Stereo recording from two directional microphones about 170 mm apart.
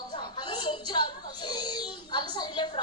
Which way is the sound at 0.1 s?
25° left (ahead or behind).